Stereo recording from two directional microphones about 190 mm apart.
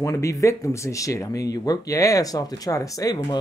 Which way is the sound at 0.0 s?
15° left (ahead or behind).